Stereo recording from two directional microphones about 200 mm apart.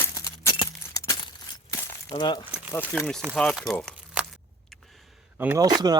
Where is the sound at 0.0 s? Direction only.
15° left (ahead or behind).